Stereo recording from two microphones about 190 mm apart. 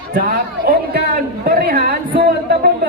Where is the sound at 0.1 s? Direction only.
50° right (ahead or behind).